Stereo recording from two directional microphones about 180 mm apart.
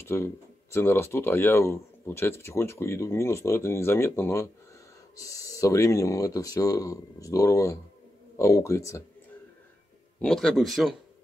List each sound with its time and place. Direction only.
0.0 s speech: 15° left (ahead or behind)
10.1 s speech: 5° left (ahead or behind)